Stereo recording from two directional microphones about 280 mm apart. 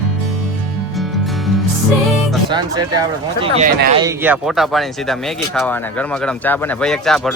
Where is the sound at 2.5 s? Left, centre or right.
Centre.